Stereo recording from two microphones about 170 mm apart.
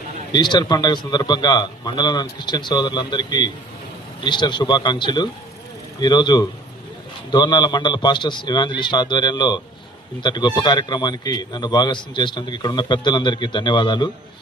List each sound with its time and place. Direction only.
0.3 s a man's voice: 25° left (ahead or behind)